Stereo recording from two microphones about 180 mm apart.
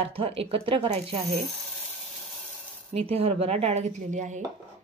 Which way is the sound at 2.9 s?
35° right (ahead or behind).